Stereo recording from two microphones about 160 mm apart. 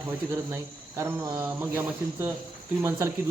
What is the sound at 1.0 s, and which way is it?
Speech, 15° right (ahead or behind).